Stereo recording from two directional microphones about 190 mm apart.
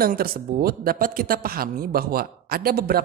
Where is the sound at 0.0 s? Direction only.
50° right (ahead or behind).